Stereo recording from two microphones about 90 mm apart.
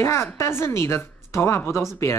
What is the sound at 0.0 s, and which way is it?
A woman's voice, 30° left (ahead or behind).